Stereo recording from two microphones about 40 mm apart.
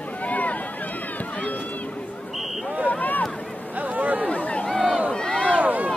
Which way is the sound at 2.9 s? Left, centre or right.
Left.